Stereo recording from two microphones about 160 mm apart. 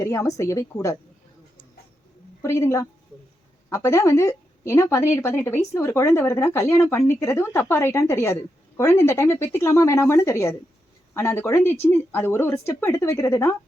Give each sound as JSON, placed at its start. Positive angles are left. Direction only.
{"t": 0.0, "sound": "a woman's voice", "side_deg": 20}
{"t": 2.4, "sound": "a woman's voice", "side_deg": 20}